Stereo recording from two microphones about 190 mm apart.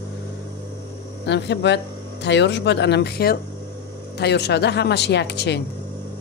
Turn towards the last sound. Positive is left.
turn(degrees=65)  # may be behind; listen again after turning